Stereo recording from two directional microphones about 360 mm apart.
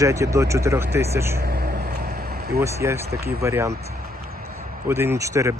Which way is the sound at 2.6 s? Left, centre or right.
Centre.